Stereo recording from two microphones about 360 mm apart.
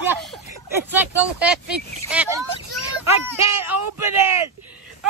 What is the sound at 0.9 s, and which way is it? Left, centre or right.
Speech, centre.